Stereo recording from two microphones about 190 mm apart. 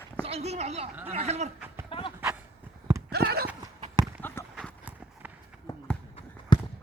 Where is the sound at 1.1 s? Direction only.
35° right (ahead or behind).